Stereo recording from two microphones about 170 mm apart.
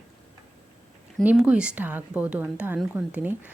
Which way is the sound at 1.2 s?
10° right (ahead or behind).